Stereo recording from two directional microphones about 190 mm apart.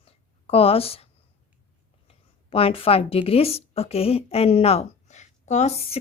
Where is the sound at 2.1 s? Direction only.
30° left (ahead or behind).